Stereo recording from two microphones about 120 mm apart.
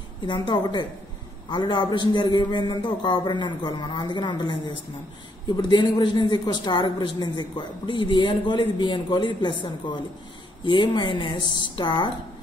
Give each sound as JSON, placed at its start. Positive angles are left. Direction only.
{"t": 0.3, "sound": "a woman's voice", "side_deg": 40}